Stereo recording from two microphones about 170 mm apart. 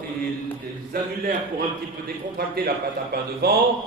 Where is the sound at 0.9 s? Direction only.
55° right (ahead or behind).